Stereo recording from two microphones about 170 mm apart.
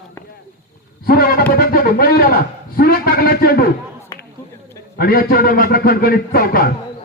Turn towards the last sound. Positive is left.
turn(degrees=60)  # may be behind; listen again after turning